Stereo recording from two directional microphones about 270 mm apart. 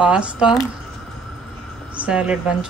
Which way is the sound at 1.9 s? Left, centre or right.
Centre.